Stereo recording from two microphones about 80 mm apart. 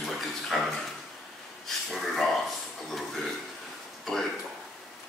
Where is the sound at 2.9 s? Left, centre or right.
Centre.